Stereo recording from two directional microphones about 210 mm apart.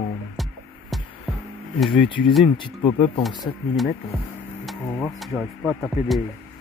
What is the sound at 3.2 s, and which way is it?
Speech, centre (ahead or behind).